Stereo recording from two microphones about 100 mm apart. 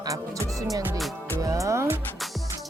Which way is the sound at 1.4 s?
35° right (ahead or behind).